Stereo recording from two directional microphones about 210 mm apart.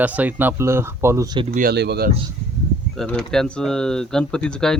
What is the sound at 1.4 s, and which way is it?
Speech, 40° right (ahead or behind).